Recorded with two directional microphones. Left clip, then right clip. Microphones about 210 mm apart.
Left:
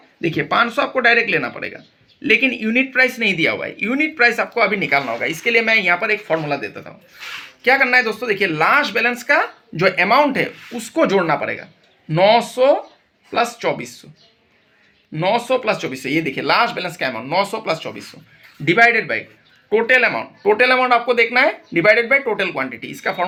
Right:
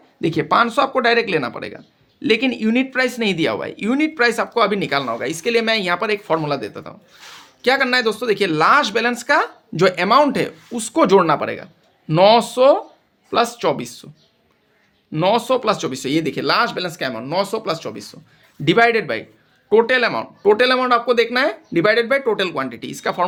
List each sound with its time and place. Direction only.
0.2 s speech: 55° right (ahead or behind)
15.1 s speech: 55° right (ahead or behind); by 17.9 s 40° right (ahead or behind)
18.6 s speech: 55° right (ahead or behind)